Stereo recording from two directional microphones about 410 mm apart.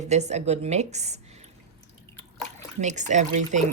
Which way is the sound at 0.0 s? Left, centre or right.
Centre.